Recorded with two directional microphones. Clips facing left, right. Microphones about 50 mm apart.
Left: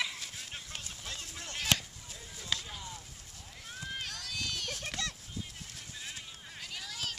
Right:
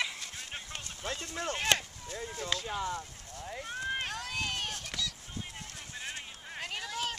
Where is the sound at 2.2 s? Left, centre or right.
Right.